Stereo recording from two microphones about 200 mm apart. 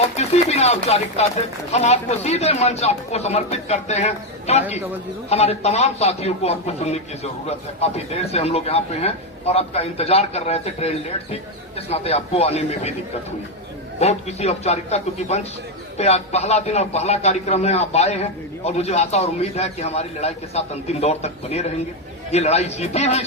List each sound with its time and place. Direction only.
0.2 s a sound: 35° left (ahead or behind)
1.7 s a man's voice: 35° left (ahead or behind)
14.0 s a man's voice: 30° left (ahead or behind)